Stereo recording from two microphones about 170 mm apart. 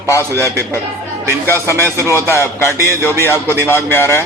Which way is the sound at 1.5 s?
15° left (ahead or behind).